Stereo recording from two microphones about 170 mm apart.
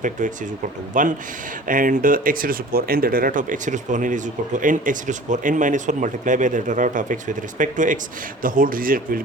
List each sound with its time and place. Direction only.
0.9 s speech: 50° right (ahead or behind)